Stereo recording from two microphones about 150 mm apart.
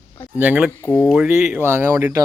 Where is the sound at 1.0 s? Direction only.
5° right (ahead or behind); by 2.2 s 20° right (ahead or behind).